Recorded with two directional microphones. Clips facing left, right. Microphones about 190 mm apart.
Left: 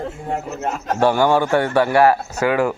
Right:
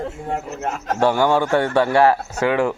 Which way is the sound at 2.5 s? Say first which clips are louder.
Left 1 dB; 5° left (ahead or behind).